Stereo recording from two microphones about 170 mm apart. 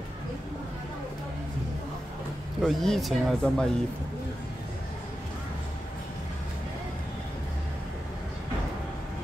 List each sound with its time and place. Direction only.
2.6 s speech: centre (ahead or behind)